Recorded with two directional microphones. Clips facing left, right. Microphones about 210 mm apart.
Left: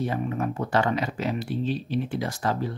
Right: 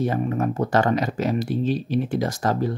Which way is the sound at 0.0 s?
45° right (ahead or behind).